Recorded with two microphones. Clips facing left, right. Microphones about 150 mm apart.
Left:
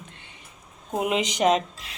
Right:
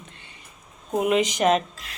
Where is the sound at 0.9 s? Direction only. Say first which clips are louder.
Right 3 dB; 15° left (ahead or behind).